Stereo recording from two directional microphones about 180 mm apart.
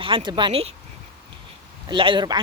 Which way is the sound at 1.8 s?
25° right (ahead or behind).